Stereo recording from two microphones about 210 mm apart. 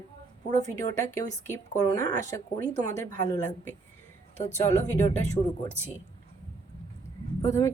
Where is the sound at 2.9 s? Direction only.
40° right (ahead or behind).